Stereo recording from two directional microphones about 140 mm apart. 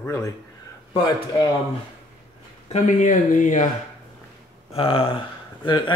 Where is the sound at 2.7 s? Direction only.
65° left (ahead or behind).